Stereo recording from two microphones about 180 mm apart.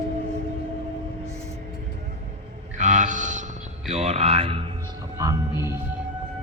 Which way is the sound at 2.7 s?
45° right (ahead or behind).